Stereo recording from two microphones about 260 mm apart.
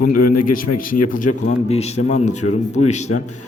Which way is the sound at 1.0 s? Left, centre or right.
Left.